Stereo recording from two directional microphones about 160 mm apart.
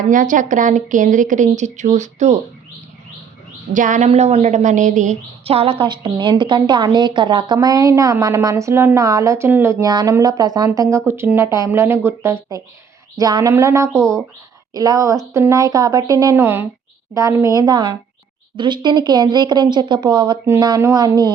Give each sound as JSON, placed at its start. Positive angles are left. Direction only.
{"t": 0.1, "sound": "speech", "side_deg": -55}
{"t": 3.7, "sound": "a woman's voice", "side_deg": -55}
{"t": 9.8, "sound": "a woman's voice", "side_deg": -25}
{"t": 16.4, "sound": "a woman's voice", "side_deg": -10}